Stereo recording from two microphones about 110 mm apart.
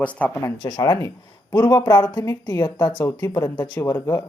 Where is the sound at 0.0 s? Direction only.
10° left (ahead or behind).